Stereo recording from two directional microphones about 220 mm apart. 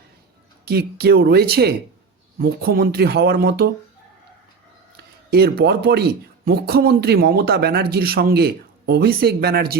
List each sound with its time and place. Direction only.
0.6 s speech: 45° right (ahead or behind)
5.3 s speech: 45° right (ahead or behind)